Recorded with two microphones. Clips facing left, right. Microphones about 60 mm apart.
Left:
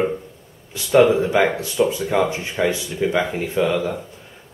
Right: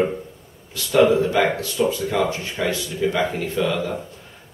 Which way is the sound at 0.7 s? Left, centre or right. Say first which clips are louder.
Left 2 dB; left.